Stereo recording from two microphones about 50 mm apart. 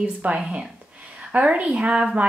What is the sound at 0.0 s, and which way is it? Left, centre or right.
Speech, right.